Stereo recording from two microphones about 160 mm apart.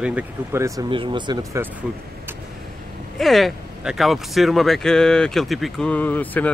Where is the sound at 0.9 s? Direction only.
30° right (ahead or behind).